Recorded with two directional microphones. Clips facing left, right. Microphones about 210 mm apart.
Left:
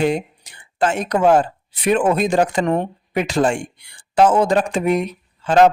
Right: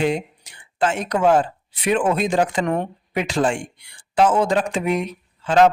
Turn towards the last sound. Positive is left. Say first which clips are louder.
# left 2 dB
turn(degrees=40)  # may be behind; listen again after turning